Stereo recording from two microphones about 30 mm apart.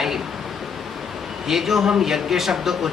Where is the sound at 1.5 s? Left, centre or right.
Centre.